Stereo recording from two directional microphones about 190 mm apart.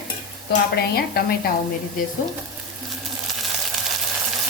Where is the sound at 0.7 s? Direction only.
55° left (ahead or behind).